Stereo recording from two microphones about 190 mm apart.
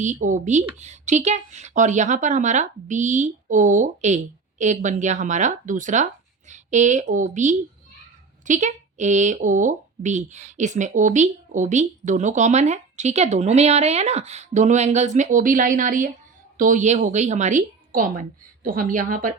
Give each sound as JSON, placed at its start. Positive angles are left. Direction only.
{"t": 0.0, "sound": "a woman's voice", "side_deg": -40}